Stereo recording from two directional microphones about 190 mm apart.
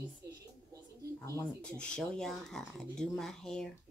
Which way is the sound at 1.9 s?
5° left (ahead or behind).